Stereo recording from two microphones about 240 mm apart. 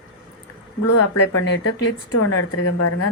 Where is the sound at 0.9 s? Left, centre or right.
Left.